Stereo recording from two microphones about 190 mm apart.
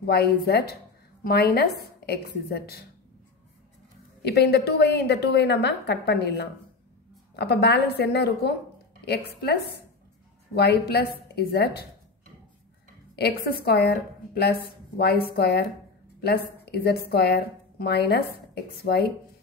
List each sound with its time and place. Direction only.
0.0 s a woman's voice: 55° left (ahead or behind)
4.2 s a woman's voice: 60° left (ahead or behind)
13.1 s a woman's voice: 55° left (ahead or behind)